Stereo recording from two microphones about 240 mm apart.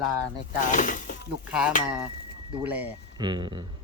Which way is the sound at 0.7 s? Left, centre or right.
Left.